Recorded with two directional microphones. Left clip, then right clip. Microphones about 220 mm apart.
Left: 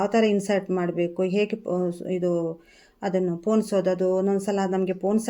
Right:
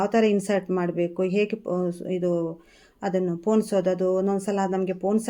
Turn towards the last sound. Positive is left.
turn(degrees=0)  # may be behind; listen again after turning